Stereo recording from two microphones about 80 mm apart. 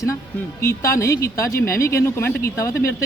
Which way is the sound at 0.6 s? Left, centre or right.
Left.